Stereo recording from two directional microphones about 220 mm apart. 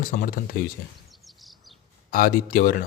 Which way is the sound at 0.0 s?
40° left (ahead or behind).